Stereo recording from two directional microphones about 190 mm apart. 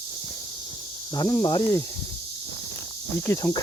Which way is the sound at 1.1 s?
20° left (ahead or behind).